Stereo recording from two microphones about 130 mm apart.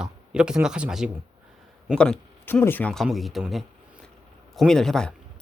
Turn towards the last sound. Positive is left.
turn(degrees=5)  # may be behind; listen again after turning